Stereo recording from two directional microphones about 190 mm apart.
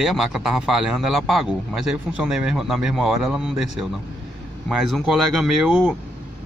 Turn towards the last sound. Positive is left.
turn(degrees=-5)  # may be behind; listen again after turning